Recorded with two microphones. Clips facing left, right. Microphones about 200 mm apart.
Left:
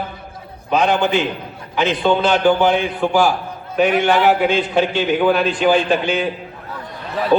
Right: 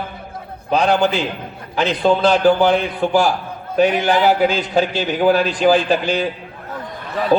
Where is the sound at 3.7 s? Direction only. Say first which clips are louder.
Even; 35° right (ahead or behind).